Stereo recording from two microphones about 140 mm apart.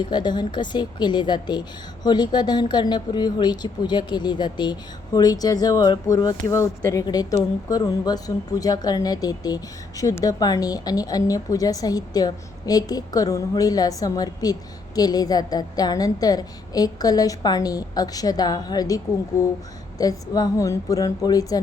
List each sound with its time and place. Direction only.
0.0 s a woman's voice: 30° left (ahead or behind)